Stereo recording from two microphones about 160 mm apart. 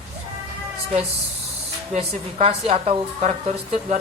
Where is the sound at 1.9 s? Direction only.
40° right (ahead or behind).